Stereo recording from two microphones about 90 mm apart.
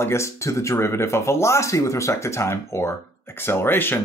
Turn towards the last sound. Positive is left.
turn(degrees=25)  # may be behind; listen again after turning